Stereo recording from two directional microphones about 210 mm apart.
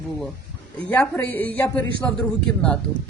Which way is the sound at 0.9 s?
10° left (ahead or behind).